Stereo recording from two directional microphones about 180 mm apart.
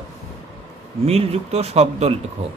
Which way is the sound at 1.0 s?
35° right (ahead or behind).